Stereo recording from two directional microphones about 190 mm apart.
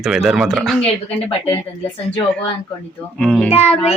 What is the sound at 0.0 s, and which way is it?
Speech, centre (ahead or behind).